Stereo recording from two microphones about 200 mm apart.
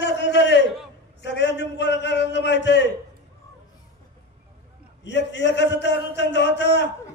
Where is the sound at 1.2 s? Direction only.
60° left (ahead or behind).